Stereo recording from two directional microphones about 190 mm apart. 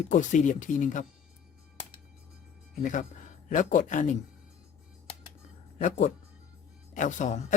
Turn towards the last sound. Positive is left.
turn(degrees=40)  # may be behind; listen again after turning